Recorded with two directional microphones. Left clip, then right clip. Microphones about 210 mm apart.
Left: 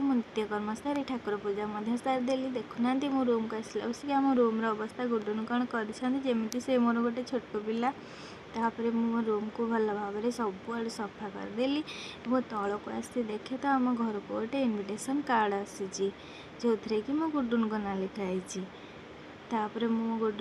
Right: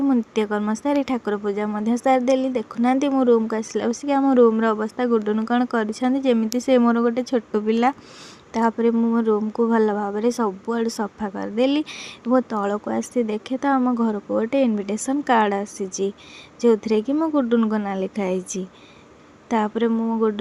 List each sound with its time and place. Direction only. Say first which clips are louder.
0.1 s speech: right 10 dB; 45° right (ahead or behind)